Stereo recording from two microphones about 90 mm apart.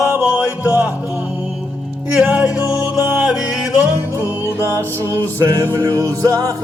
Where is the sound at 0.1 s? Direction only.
20° right (ahead or behind).